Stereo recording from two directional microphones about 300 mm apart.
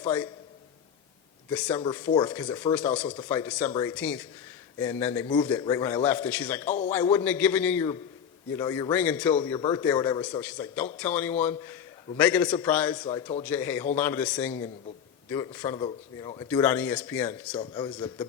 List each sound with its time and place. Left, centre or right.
0.0 s a man's voice: centre
1.5 s a man's voice: centre
9.4 s a man's voice: centre
17.6 s a man's voice: centre